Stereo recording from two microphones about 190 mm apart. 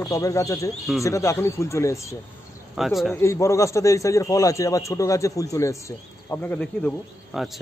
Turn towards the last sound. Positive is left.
turn(degrees=0)  # may be behind; listen again after turning